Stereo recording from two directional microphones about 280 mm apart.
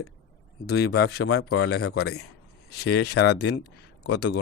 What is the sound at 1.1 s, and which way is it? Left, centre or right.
Speech, left.